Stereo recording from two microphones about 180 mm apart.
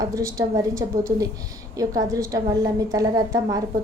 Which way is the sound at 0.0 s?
20° right (ahead or behind).